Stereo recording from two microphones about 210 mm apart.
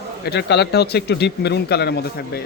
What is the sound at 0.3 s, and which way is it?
Speech, 50° left (ahead or behind).